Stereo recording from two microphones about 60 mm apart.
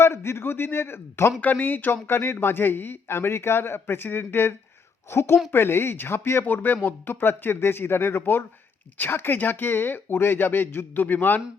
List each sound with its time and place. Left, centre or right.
0.0 s a man's voice: left
1.4 s a man's voice: left
6.4 s speech: left